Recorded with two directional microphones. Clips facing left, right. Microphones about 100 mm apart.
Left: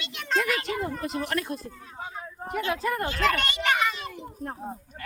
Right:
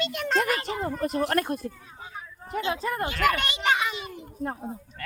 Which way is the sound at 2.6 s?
25° right (ahead or behind).